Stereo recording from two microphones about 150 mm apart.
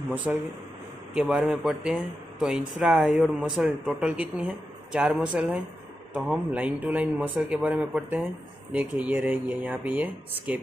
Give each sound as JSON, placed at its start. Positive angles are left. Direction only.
{"t": 0.1, "sound": "speech", "side_deg": -10}